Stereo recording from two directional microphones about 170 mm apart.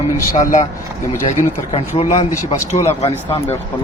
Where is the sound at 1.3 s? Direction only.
35° left (ahead or behind).